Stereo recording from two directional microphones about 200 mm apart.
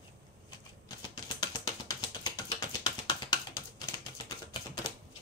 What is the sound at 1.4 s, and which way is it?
Music, 20° left (ahead or behind).